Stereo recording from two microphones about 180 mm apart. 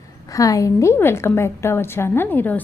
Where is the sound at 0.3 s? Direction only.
20° left (ahead or behind).